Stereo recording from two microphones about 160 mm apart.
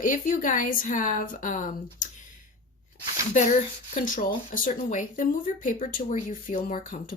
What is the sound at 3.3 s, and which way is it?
Speech, 45° left (ahead or behind).